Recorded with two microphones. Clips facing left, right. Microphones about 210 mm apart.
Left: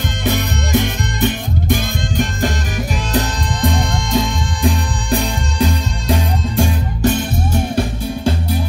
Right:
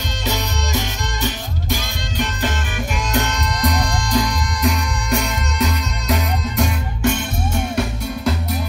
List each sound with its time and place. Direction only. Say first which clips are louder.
0.2 s music: left 5 dB; 55° left (ahead or behind)
3.1 s music: left 2 dB; 30° left (ahead or behind)